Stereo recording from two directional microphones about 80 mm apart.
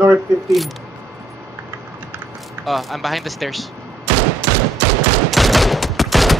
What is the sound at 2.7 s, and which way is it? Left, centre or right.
Speech, centre.